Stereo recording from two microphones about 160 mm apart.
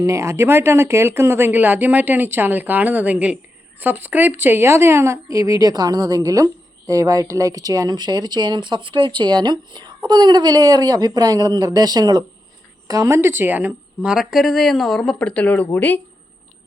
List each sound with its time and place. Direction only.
0.0 s a woman's voice: 20° right (ahead or behind); by 16.0 s 10° left (ahead or behind)